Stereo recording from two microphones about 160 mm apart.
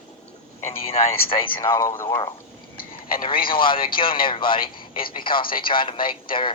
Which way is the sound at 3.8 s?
30° left (ahead or behind).